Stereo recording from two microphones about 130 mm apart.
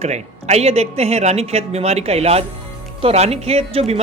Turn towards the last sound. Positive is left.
turn(degrees=-50)  # may be behind; listen again after turning